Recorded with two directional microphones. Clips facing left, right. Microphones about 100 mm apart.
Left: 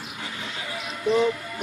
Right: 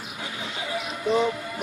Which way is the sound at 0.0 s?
5° right (ahead or behind).